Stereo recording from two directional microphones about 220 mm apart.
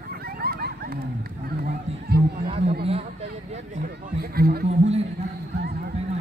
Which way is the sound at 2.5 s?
25° right (ahead or behind).